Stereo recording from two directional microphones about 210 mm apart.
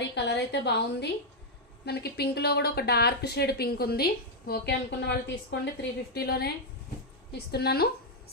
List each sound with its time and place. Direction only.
0.1 s a woman's voice: 55° left (ahead or behind)